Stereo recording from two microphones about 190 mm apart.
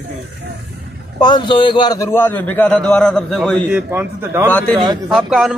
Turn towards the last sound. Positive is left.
turn(degrees=0)  # may be behind; listen again after turning